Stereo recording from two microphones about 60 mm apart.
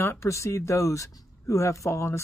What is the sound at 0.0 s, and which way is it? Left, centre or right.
Speech, left.